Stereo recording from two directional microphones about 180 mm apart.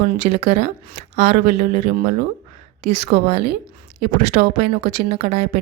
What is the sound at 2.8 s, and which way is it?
Speech, 60° right (ahead or behind).